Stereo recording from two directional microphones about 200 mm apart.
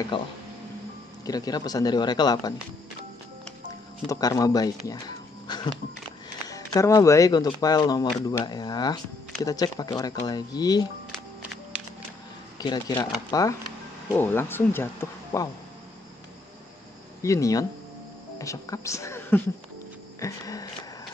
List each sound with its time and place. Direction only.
0.1 s speech: 25° left (ahead or behind)
4.1 s speech: 15° left (ahead or behind)
12.5 s speech: 20° left (ahead or behind)
17.2 s speech: 15° left (ahead or behind)
20.2 s a sound: 15° left (ahead or behind)